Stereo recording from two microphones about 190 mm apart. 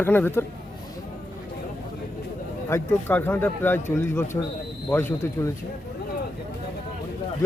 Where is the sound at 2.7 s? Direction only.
10° left (ahead or behind).